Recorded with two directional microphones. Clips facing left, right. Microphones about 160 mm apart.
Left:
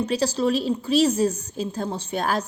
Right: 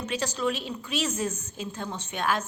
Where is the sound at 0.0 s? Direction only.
35° left (ahead or behind).